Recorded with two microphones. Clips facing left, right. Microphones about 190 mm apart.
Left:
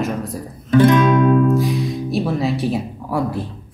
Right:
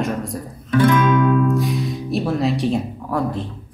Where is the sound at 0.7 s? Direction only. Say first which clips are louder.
Left 3 dB; 30° left (ahead or behind).